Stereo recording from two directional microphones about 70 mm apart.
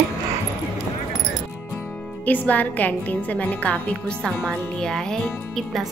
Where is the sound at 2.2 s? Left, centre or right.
Left.